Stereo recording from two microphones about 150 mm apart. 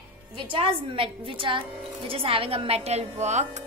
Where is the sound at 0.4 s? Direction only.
35° right (ahead or behind).